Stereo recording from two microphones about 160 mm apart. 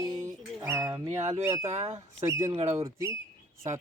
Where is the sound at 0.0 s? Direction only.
25° right (ahead or behind).